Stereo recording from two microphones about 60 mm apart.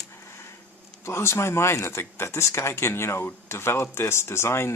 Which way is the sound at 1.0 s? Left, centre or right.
Left.